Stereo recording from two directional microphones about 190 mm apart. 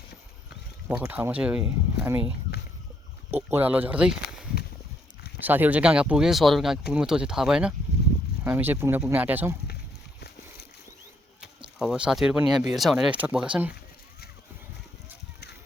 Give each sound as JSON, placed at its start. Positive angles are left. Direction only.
{"t": 1.1, "sound": "speech", "side_deg": -10}
{"t": 3.5, "sound": "speech", "side_deg": -10}
{"t": 5.4, "sound": "speech", "side_deg": -10}
{"t": 10.2, "sound": "splash", "side_deg": 60}
{"t": 11.8, "sound": "speech", "side_deg": -5}